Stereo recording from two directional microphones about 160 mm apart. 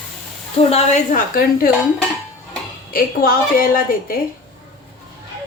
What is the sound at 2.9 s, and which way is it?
A woman's voice, 65° left (ahead or behind).